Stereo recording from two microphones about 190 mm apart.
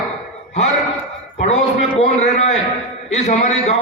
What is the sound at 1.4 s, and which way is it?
A man's voice, 35° left (ahead or behind).